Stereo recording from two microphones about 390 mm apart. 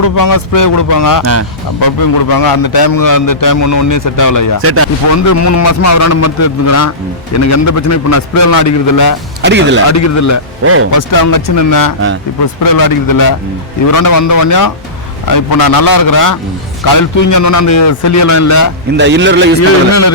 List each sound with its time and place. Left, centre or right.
0.0 s a man's voice: left
1.2 s speech: right
2.3 s a man's voice: left
4.5 s speech: right
5.1 s a man's voice: left
9.4 s speech: right
9.8 s a man's voice: left
10.6 s speech: right
10.9 s a man's voice: left
18.9 s a man's voice: right
19.9 s a man's voice: left